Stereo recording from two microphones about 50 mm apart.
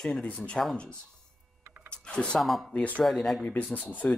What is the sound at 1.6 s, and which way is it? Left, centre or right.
Vehicle, right.